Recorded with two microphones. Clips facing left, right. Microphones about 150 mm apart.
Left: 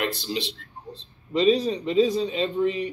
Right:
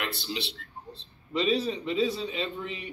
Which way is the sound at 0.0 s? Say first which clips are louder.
Left 7 dB; 45° left (ahead or behind).